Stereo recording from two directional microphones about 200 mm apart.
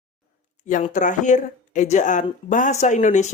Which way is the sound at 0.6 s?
40° left (ahead or behind).